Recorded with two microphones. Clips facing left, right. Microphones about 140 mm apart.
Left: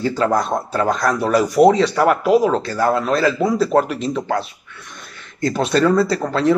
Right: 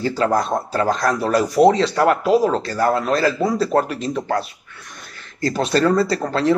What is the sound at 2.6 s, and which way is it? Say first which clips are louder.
Speech: left 1 dB; 30° right (ahead or behind).